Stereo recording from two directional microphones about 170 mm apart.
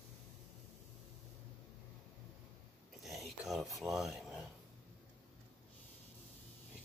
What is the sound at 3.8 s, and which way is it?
Filing, centre (ahead or behind).